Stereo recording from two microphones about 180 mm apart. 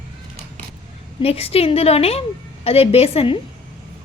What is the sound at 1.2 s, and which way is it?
A woman's voice, 35° left (ahead or behind).